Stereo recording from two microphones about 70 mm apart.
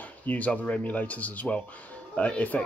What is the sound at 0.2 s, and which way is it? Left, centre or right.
Speech, left.